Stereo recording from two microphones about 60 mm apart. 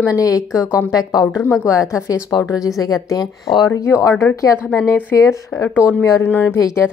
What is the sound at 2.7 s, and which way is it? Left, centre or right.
Speech, left.